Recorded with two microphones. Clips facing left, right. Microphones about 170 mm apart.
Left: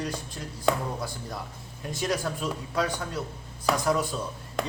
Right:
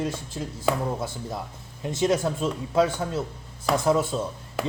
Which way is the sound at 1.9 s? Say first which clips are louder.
Right 6 dB; 25° right (ahead or behind).